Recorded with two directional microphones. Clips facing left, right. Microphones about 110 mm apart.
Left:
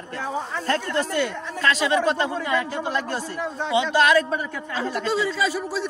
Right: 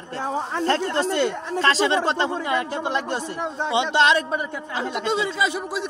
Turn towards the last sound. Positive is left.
turn(degrees=-20)  # may be behind; listen again after turning